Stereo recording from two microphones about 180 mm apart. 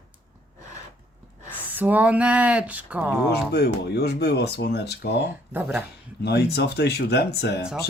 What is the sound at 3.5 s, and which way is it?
Speech, 65° left (ahead or behind).